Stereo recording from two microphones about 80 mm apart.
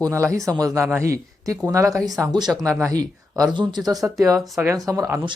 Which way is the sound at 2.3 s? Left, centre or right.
Right.